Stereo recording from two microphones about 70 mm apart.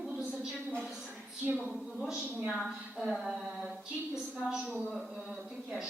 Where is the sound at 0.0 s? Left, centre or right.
Centre.